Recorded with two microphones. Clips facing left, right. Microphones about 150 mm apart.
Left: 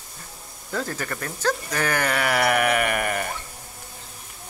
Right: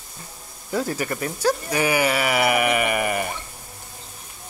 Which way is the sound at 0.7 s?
10° right (ahead or behind).